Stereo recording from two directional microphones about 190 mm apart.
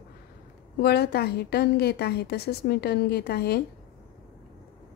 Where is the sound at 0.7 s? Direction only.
55° left (ahead or behind).